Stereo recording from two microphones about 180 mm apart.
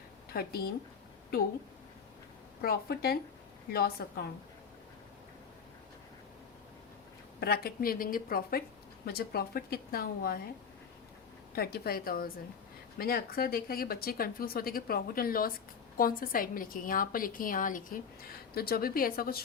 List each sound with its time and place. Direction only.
0.3 s speech: 60° left (ahead or behind)
2.6 s speech: 60° left (ahead or behind)
7.3 s speech: 60° left (ahead or behind)
11.5 s a woman's voice: 60° left (ahead or behind)